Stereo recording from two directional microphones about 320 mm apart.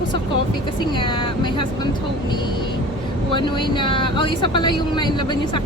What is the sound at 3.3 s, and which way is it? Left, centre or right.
Speech, centre.